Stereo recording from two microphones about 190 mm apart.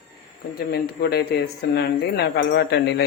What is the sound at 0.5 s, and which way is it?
Speech, 55° left (ahead or behind).